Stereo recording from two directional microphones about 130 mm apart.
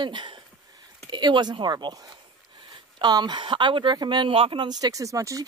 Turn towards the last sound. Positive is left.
turn(degrees=-25)  # may be behind; listen again after turning